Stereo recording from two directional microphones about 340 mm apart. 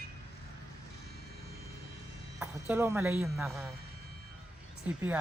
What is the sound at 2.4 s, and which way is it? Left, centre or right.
Speech, centre.